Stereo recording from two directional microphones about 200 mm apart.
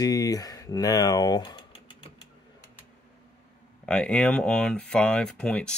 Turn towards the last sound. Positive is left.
turn(degrees=5)  # may be behind; listen again after turning